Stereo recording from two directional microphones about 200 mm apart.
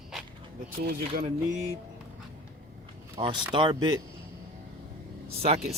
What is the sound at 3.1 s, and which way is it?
Speech, 25° right (ahead or behind).